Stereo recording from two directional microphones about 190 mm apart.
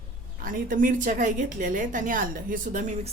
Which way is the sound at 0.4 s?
45° right (ahead or behind).